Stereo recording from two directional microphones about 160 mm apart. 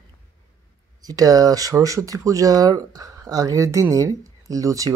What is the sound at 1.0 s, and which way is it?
Speech, 20° right (ahead or behind).